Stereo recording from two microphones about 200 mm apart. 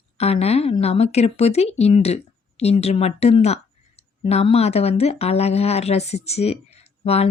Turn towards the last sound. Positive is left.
turn(degrees=30)  # may be behind; listen again after turning